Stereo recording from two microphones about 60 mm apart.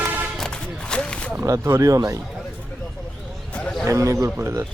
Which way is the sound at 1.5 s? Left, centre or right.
Right.